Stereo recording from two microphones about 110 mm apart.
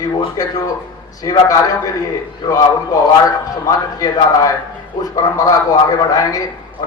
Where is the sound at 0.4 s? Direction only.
35° left (ahead or behind).